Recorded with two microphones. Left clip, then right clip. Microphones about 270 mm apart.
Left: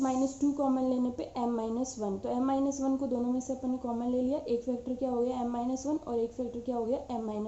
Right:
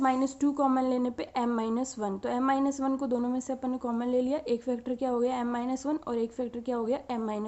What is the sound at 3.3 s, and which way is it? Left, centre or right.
A woman's voice, right.